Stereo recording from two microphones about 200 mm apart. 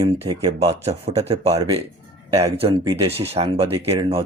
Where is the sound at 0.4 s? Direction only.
25° right (ahead or behind).